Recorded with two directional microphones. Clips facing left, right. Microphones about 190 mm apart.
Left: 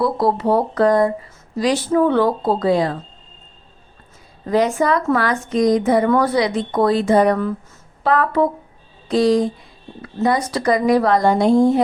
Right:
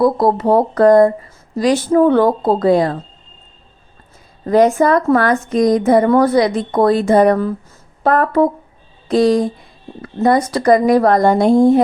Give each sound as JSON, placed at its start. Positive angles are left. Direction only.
{"t": 0.0, "sound": "a woman's voice", "side_deg": -50}
{"t": 4.4, "sound": "a woman's voice", "side_deg": -50}